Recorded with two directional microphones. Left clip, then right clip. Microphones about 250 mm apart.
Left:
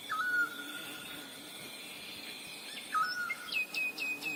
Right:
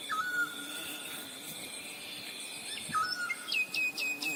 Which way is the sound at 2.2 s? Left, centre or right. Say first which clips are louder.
Right 2 dB; right.